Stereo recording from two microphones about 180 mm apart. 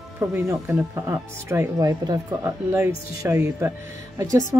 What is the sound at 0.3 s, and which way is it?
Speech, 15° right (ahead or behind).